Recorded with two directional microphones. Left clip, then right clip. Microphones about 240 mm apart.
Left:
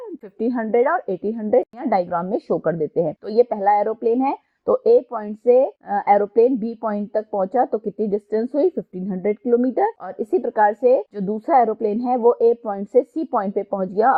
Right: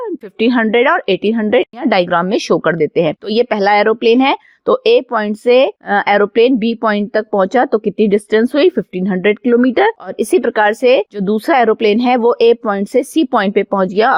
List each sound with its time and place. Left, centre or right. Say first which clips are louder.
0.0 s a woman's voice: right 10 dB; right